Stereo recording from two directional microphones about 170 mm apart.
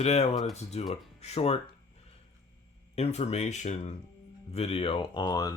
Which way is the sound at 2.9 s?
40° left (ahead or behind).